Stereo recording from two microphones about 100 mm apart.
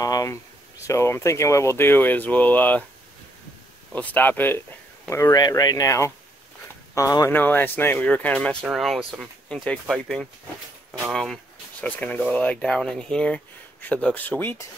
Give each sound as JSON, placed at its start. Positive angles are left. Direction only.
{"t": 0.0, "sound": "a sound", "side_deg": 35}
{"t": 0.8, "sound": "speech", "side_deg": 30}
{"t": 3.9, "sound": "speech", "side_deg": 15}
{"t": 5.1, "sound": "speech", "side_deg": 35}
{"t": 7.2, "sound": "speech", "side_deg": 20}
{"t": 8.6, "sound": "speech", "side_deg": 0}
{"t": 11.8, "sound": "speech", "side_deg": 15}